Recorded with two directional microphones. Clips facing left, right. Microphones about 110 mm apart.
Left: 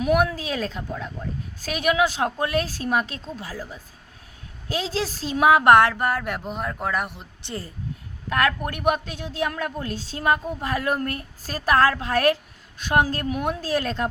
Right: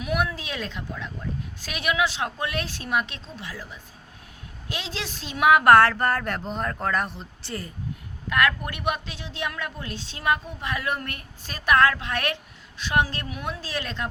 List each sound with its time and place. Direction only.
0.0 s a woman's voice: 40° left (ahead or behind); by 7.5 s 15° left (ahead or behind)
8.3 s a woman's voice: 35° left (ahead or behind)